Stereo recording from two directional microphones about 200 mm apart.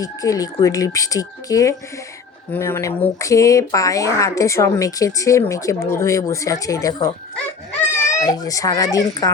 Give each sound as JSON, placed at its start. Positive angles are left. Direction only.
{"t": 0.0, "sound": "speech", "side_deg": 15}
{"t": 8.1, "sound": "speech", "side_deg": 20}